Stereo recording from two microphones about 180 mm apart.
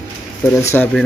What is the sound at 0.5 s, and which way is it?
Speech, 15° left (ahead or behind).